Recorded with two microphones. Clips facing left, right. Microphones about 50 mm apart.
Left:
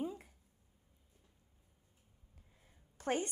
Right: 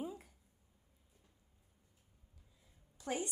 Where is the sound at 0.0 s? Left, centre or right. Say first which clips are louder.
Left 3 dB; centre.